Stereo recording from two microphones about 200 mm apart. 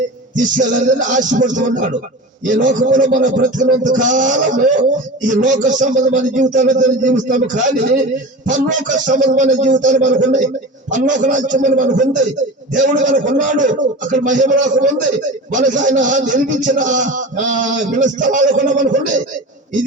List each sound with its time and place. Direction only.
0.5 s a man's voice: 40° right (ahead or behind)